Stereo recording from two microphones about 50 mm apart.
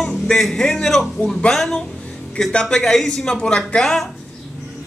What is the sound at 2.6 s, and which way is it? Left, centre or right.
Music, centre.